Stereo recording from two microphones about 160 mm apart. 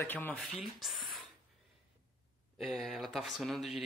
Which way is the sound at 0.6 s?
Centre (ahead or behind).